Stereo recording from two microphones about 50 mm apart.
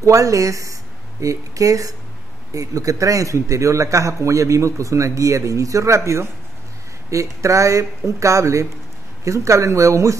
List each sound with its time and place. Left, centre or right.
0.0 s a man's voice: right
2.9 s a man's voice: right